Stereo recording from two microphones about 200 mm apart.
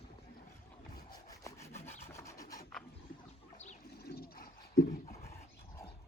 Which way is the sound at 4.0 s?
50° left (ahead or behind).